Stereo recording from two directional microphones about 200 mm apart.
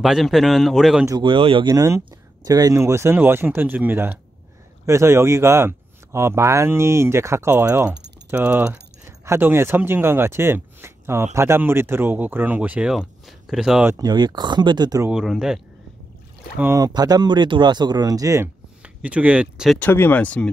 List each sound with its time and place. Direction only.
0.0 s a man's voice: centre (ahead or behind)
1.0 s a man's voice: 20° right (ahead or behind); by 13.9 s 5° right (ahead or behind)
13.9 s speech: 20° right (ahead or behind)
15.0 s a man's voice: centre (ahead or behind)
16.5 s speech: 15° right (ahead or behind)
19.8 s speech: 10° left (ahead or behind)